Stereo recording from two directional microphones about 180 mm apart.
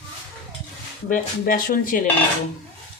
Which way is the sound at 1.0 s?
50° left (ahead or behind).